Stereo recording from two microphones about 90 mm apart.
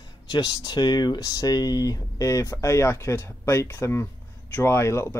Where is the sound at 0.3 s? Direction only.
50° left (ahead or behind).